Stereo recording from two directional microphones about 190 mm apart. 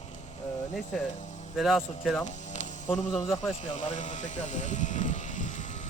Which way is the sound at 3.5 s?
40° left (ahead or behind).